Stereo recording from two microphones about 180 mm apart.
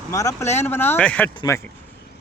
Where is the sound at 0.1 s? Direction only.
15° left (ahead or behind).